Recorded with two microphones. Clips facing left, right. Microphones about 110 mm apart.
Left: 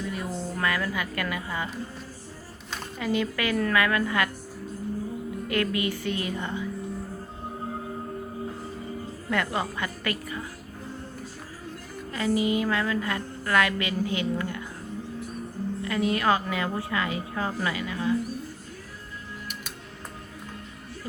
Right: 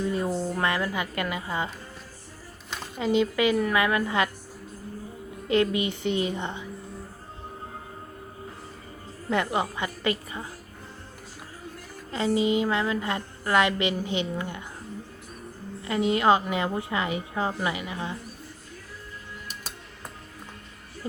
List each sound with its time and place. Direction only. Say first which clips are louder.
0.0 s a woman's voice: right 5 dB; 35° right (ahead or behind)
3.0 s a woman's voice: right 4 dB; 20° right (ahead or behind)
5.5 s a woman's voice: right 4 dB; 20° right (ahead or behind)
9.3 s a woman's voice: right 2 dB; 20° right (ahead or behind)
12.1 s a woman's voice: right 1 dB; 25° right (ahead or behind)
15.8 s a woman's voice: right 3 dB; 20° right (ahead or behind)